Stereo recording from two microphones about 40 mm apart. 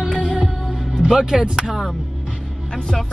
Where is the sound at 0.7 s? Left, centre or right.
Centre.